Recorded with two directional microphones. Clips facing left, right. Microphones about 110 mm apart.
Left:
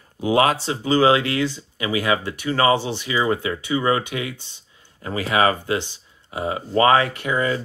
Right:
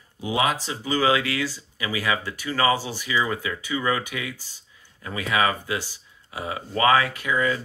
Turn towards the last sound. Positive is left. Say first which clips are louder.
# left 2 dB
turn(degrees=30)  # may be behind; listen again after turning